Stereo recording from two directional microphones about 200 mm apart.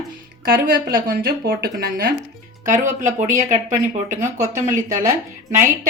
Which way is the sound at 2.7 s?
40° right (ahead or behind).